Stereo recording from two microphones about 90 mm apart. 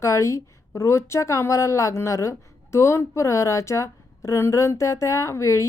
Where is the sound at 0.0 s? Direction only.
35° left (ahead or behind).